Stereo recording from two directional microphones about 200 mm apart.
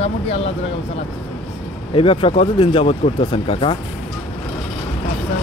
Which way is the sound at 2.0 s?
25° left (ahead or behind).